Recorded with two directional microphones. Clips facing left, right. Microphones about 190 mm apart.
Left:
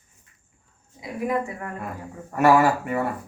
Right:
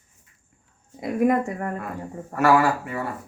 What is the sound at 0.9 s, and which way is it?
Speech, 45° right (ahead or behind).